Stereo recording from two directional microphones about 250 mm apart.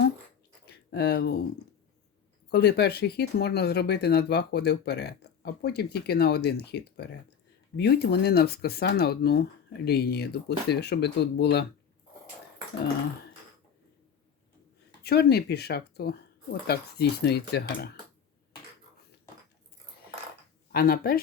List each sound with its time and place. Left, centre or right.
0.6 s a sound: left
2.5 s speech: left
15.0 s speech: left
20.7 s speech: left